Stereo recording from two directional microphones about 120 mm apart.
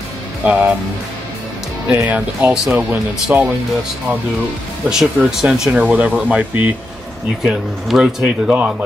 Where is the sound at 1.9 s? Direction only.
15° right (ahead or behind).